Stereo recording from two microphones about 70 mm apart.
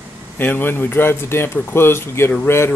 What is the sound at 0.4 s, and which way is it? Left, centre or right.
Speech, left.